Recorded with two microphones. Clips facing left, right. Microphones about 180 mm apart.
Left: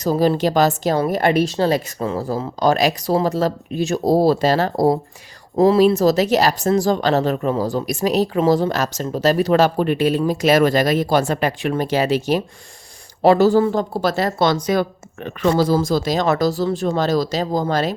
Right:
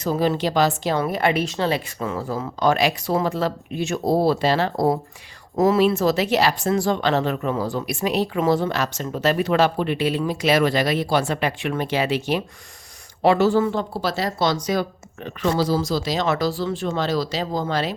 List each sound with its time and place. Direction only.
0.0 s speech: 40° left (ahead or behind)